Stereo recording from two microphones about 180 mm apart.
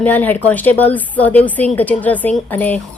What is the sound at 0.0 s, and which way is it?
A woman's voice, 10° left (ahead or behind).